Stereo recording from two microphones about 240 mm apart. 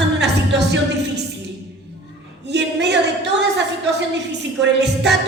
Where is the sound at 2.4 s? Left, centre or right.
Right.